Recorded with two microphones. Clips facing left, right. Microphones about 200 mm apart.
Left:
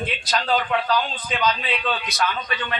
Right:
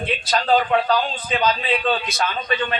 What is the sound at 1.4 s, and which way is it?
Speech, 30° right (ahead or behind).